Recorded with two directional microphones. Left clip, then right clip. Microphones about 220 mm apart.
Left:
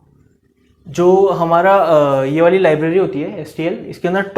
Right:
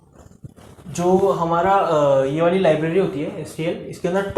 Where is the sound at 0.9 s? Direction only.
40° left (ahead or behind).